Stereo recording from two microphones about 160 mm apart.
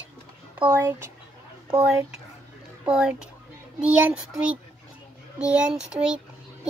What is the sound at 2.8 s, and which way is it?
Speech, 5° right (ahead or behind).